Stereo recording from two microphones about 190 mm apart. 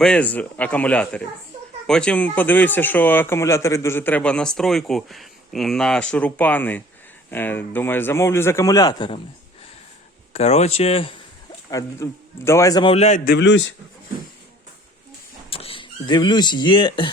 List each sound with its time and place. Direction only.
0.0 s speech: 5° left (ahead or behind); by 9.2 s 25° left (ahead or behind)
10.3 s speech: 35° left (ahead or behind)
11.7 s speech: 15° left (ahead or behind)
12.9 s speech: 35° left (ahead or behind)
13.2 s a man's voice: 65° left (ahead or behind)
15.4 s speech: 30° left (ahead or behind)